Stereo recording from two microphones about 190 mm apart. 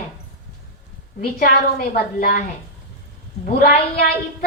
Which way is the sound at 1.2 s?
50° left (ahead or behind).